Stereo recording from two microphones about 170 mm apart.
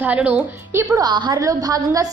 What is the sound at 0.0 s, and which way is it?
A woman's voice, 10° right (ahead or behind).